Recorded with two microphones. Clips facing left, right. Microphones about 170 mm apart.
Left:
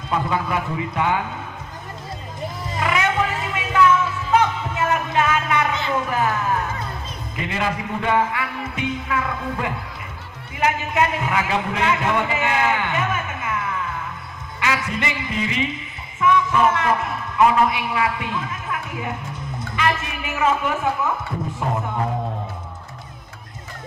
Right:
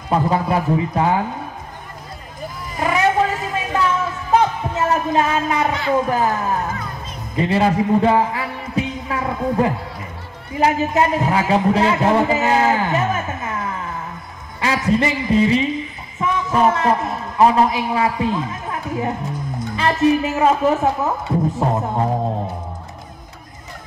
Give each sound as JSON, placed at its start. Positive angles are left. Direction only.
{"t": 0.1, "sound": "a man's voice", "side_deg": -35}
{"t": 2.8, "sound": "music", "side_deg": -35}
{"t": 5.9, "sound": "a man's voice", "side_deg": -35}
{"t": 14.6, "sound": "music", "side_deg": -35}
{"t": 16.2, "sound": "a man's voice", "side_deg": -35}